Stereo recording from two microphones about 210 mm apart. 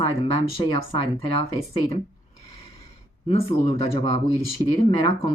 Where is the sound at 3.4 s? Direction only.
25° left (ahead or behind).